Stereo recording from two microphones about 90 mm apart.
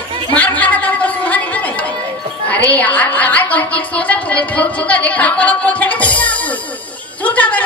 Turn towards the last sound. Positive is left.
turn(degrees=15)  # may be behind; listen again after turning